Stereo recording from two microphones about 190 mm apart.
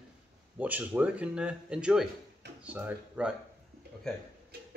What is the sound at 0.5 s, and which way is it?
Speech, 10° right (ahead or behind).